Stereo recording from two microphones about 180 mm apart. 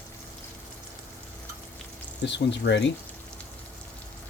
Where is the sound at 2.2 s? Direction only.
75° left (ahead or behind).